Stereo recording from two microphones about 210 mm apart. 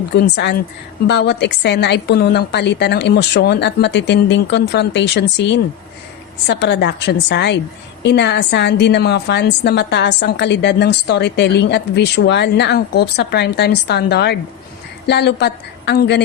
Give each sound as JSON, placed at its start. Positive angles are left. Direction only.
{"t": 0.1, "sound": "a woman's voice", "side_deg": 55}